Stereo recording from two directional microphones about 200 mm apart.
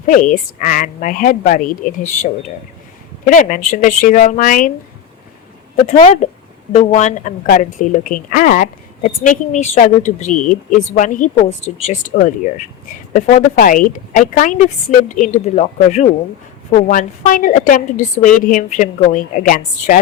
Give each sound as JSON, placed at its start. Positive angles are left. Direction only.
{"t": 0.1, "sound": "a woman's voice", "side_deg": 40}
{"t": 3.2, "sound": "a woman's voice", "side_deg": 40}
{"t": 5.7, "sound": "a woman's voice", "side_deg": 30}